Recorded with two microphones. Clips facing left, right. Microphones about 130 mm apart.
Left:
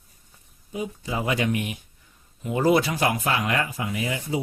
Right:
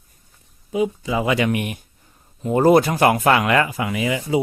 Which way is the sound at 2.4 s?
45° right (ahead or behind).